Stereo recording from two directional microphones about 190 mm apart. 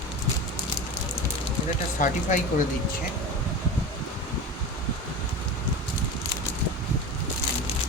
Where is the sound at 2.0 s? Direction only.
40° left (ahead or behind).